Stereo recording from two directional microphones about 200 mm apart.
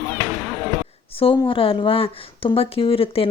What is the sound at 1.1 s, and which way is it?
Speech, 25° left (ahead or behind).